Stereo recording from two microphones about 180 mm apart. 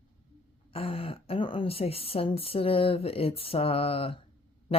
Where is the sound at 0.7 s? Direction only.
30° left (ahead or behind).